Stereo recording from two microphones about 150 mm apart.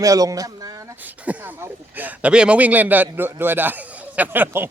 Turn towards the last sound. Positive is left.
turn(degrees=-15)  # may be behind; listen again after turning